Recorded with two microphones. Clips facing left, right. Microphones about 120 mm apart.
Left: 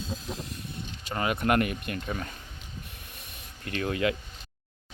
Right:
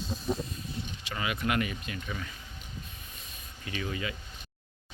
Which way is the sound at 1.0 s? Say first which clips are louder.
Left 5 dB; 45° left (ahead or behind).